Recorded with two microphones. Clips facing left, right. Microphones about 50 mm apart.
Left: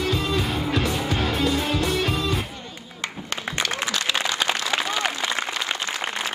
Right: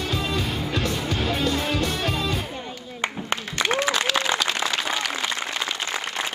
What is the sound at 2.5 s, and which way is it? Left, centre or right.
Music, right.